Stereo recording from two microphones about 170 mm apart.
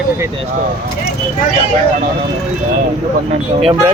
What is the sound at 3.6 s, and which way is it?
Speech, 35° right (ahead or behind).